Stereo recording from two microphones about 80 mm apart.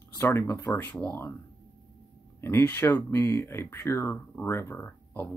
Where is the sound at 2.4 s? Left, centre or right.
Left.